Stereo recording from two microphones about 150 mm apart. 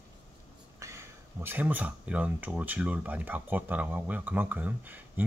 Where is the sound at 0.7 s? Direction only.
20° right (ahead or behind).